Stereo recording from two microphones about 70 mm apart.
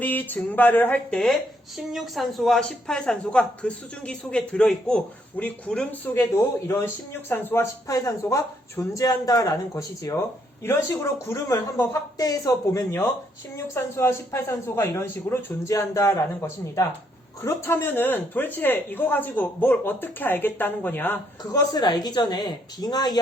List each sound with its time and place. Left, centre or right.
0.0 s speech: left
1.1 s a woman's voice: centre
6.7 s a man's voice: left
7.6 s speech: left
8.7 s a man's voice: left
9.0 s a man's voice: left
10.6 s speech: left
12.1 s a man's voice: left
15.7 s speech: left
21.5 s a woman's voice: left